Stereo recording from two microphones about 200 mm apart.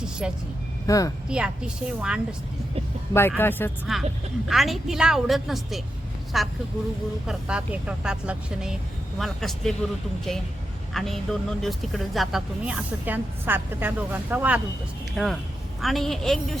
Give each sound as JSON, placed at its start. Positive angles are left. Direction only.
{"t": 0.9, "sound": "speech", "side_deg": 15}
{"t": 1.3, "sound": "speech", "side_deg": -5}
{"t": 3.1, "sound": "speech", "side_deg": 10}
{"t": 3.9, "sound": "speech", "side_deg": 0}
{"t": 10.9, "sound": "speech", "side_deg": 0}